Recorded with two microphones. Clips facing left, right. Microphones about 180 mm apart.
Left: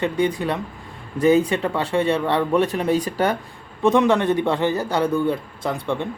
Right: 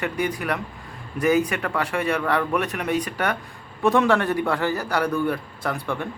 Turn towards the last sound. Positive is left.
turn(degrees=20)  # may be behind; listen again after turning